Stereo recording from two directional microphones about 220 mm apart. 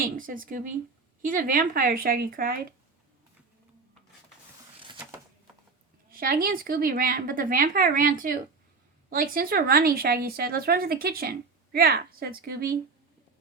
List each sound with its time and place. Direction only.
0.2 s speech: 40° right (ahead or behind)
4.8 s a sound: 20° right (ahead or behind)
6.1 s speech: 40° right (ahead or behind)